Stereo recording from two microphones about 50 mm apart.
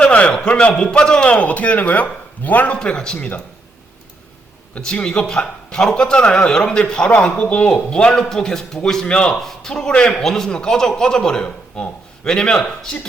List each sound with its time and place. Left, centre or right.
0.0 s a man's voice: left
2.7 s a man's voice: centre
4.7 s a man's voice: left